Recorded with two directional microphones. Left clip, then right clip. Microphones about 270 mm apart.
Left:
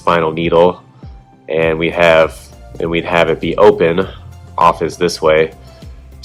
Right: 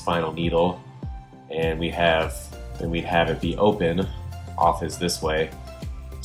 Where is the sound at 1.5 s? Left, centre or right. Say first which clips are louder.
Left 12 dB; left.